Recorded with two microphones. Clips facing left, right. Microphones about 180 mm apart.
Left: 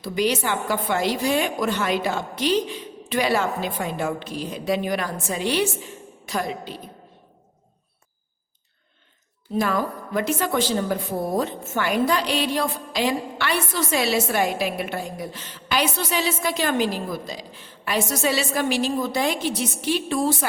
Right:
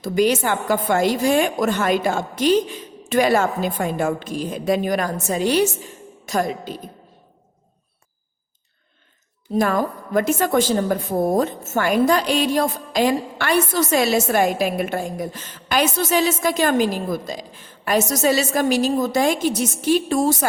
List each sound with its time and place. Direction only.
0.0 s a woman's voice: 45° right (ahead or behind)
9.5 s a woman's voice: 45° right (ahead or behind)